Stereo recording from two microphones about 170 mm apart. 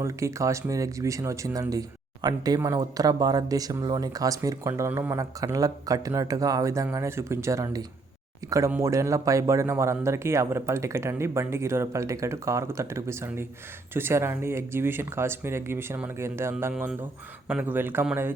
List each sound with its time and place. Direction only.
0.0 s a man's voice: 15° right (ahead or behind)